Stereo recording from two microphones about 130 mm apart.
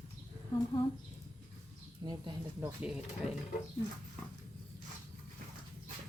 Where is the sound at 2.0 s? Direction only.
30° right (ahead or behind).